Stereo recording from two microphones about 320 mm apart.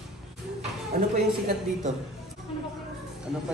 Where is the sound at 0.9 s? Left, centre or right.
Right.